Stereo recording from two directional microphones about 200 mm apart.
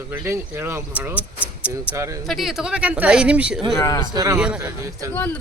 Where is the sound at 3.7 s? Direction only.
15° left (ahead or behind).